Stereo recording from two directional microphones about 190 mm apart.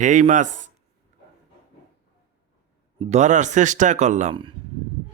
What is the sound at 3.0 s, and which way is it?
Speech, 35° right (ahead or behind).